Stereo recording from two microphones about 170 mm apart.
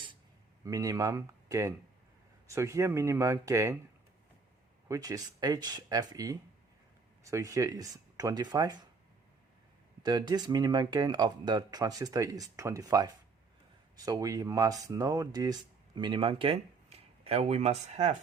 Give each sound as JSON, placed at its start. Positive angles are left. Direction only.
{"t": 0.6, "sound": "speech", "side_deg": -20}
{"t": 4.9, "sound": "speech", "side_deg": -20}
{"t": 10.0, "sound": "speech", "side_deg": -25}